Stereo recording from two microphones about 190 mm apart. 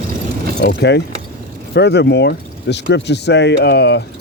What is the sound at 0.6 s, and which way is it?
Speech, 60° left (ahead or behind).